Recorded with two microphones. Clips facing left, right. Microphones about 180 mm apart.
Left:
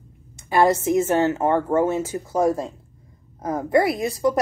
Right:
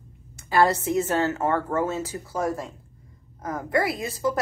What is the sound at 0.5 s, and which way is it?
A woman's voice, 15° left (ahead or behind).